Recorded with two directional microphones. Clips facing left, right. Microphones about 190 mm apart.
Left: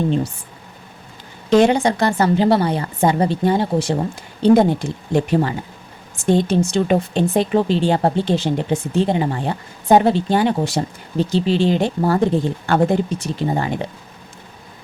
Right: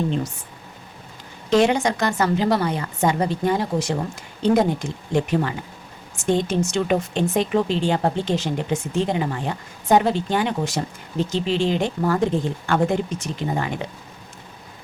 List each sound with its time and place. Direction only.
1.5 s speech: 35° left (ahead or behind)